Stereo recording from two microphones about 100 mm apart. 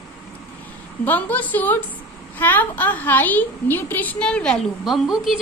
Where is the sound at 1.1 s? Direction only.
15° left (ahead or behind).